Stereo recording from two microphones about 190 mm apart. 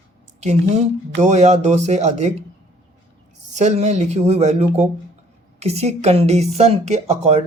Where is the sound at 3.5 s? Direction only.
35° right (ahead or behind).